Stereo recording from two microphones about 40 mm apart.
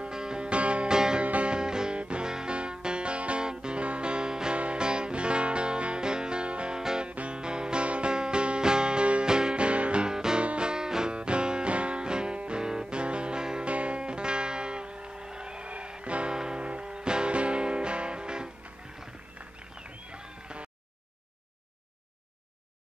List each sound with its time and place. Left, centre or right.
0.1 s music: centre
0.8 s music: centre
1.2 s music: right
1.5 s music: centre
6.8 s music: centre
7.1 s music: right
10.0 s music: centre
13.7 s music: right
16.3 s music: centre
20.1 s music: right